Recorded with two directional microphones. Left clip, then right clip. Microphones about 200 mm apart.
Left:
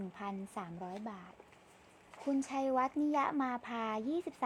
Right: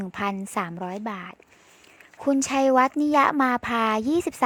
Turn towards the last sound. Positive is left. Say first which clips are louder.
# right 14 dB
turn(degrees=-35)  # may be behind; listen again after turning